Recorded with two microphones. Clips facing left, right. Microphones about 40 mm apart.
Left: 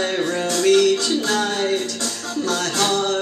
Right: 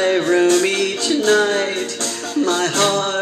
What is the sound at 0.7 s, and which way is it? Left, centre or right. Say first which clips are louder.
Music: left 5 dB; right.